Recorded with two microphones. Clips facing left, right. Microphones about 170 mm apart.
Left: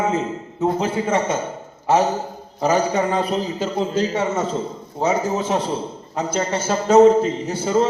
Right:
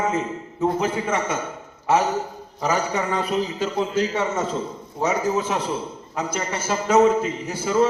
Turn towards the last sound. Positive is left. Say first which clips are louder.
# left 1 dB
turn(degrees=30)  # may be behind; listen again after turning